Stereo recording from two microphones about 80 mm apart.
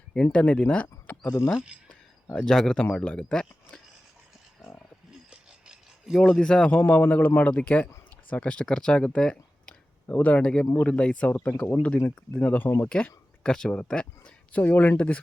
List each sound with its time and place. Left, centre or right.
0.1 s speech: centre
1.2 s speech: left
2.3 s a man's voice: centre
5.3 s a sound: centre
6.1 s a man's voice: centre
10.1 s a man's voice: left